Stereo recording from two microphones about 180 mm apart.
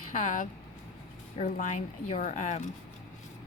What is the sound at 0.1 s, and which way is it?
A woman's voice, 45° left (ahead or behind).